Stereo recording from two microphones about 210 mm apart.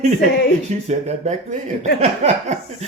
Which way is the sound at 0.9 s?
30° right (ahead or behind).